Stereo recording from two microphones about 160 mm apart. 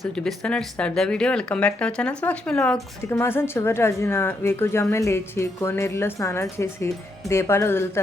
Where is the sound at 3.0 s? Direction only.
15° left (ahead or behind).